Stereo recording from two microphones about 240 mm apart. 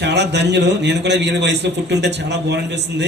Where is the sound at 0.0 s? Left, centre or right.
Right.